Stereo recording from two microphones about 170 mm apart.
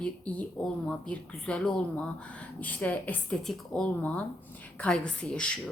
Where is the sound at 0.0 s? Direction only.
10° left (ahead or behind).